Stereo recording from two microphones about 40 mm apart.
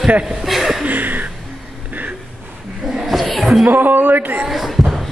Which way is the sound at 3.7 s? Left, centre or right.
Right.